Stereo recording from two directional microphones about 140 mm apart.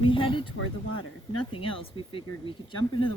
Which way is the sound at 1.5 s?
40° left (ahead or behind).